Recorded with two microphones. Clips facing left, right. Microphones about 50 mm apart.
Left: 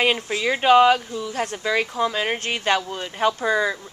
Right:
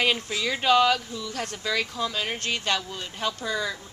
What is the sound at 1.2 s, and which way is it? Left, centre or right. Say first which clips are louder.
Speech: left 6 dB; centre.